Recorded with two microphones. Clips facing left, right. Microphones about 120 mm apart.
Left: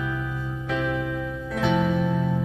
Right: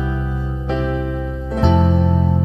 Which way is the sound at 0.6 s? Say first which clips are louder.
Right 5 dB; 30° right (ahead or behind).